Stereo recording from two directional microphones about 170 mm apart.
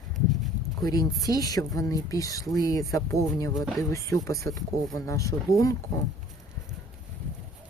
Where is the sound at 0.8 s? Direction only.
20° left (ahead or behind).